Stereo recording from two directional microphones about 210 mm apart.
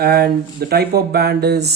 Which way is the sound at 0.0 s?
50° right (ahead or behind).